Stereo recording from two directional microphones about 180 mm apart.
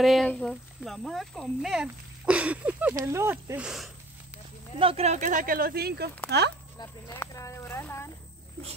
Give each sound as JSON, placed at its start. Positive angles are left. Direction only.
{"t": 0.0, "sound": "speech", "side_deg": 0}
{"t": 4.7, "sound": "speech", "side_deg": -30}
{"t": 6.8, "sound": "speech", "side_deg": 15}